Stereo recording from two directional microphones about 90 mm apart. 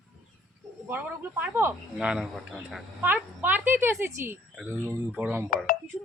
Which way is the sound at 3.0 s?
20° right (ahead or behind).